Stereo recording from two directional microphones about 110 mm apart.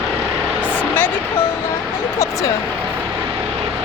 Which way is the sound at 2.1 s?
25° left (ahead or behind).